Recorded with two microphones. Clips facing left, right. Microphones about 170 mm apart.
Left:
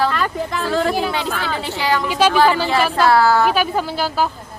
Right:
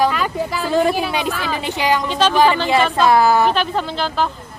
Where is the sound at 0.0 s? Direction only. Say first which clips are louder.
Right 2 dB; 10° right (ahead or behind).